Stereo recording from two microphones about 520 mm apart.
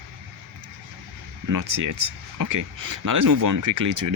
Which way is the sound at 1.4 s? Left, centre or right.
Right.